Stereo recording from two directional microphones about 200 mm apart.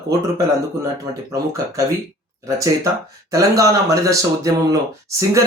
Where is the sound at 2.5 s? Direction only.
15° right (ahead or behind).